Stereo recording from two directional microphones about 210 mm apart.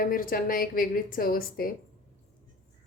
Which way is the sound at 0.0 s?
40° left (ahead or behind).